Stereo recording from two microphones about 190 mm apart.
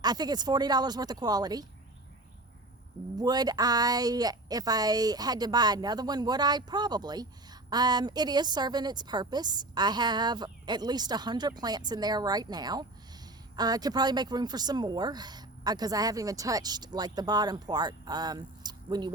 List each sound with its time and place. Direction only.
0.0 s speech: 20° right (ahead or behind)
3.2 s speech: 20° right (ahead or behind)